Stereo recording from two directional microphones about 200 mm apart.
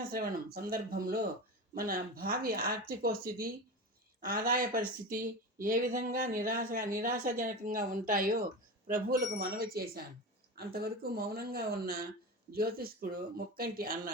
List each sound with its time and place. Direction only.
0.1 s speech: 45° right (ahead or behind)